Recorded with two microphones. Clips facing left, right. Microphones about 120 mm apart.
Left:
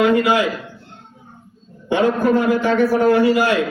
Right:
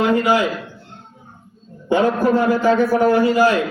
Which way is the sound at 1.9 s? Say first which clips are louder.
Even; 35° right (ahead or behind).